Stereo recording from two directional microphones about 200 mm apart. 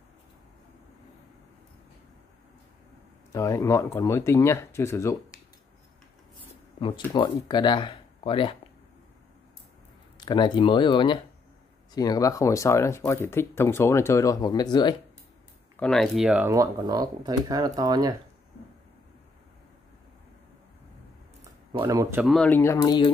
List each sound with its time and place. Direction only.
3.3 s speech: 15° left (ahead or behind)
7.1 s speech: 25° left (ahead or behind)
10.1 s speech: 20° left (ahead or behind)
15.7 s speech: 5° left (ahead or behind); by 18.1 s 20° right (ahead or behind)
21.7 s speech: 20° right (ahead or behind)
22.2 s speech: 5° left (ahead or behind); by 23.1 s 20° left (ahead or behind)